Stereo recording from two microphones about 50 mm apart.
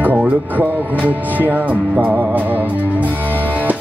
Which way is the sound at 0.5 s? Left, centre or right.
Right.